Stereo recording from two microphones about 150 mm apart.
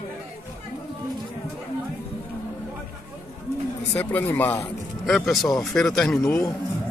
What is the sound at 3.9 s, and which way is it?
Speech, 10° left (ahead or behind).